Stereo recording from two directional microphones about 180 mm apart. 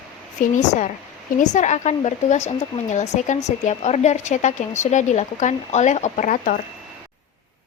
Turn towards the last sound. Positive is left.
turn(degrees=45)  # may be behind; listen again after turning